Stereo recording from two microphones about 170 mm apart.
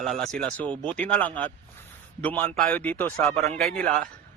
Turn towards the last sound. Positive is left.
turn(degrees=0)  # may be behind; listen again after turning